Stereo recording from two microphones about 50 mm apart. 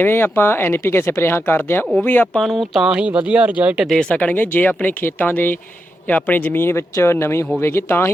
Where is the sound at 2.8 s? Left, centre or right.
Right.